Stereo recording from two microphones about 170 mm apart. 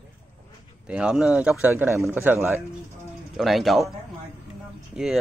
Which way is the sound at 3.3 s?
Centre (ahead or behind).